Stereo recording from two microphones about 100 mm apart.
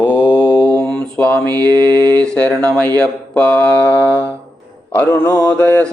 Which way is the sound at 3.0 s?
15° left (ahead or behind).